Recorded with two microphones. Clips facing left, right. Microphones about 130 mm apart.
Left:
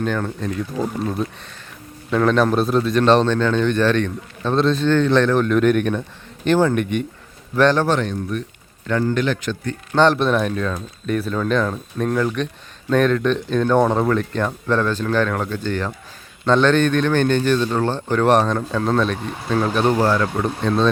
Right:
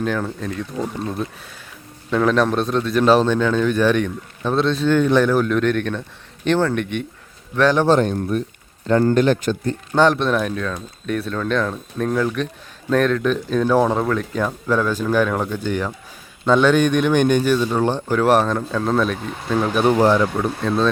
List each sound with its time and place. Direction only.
0.0 s a man's voice: centre (ahead or behind)
7.9 s a man's voice: 40° right (ahead or behind)
9.9 s a man's voice: 5° right (ahead or behind)
20.3 s a man's voice: centre (ahead or behind)